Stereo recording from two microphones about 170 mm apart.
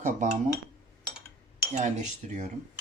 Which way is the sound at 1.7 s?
45° right (ahead or behind).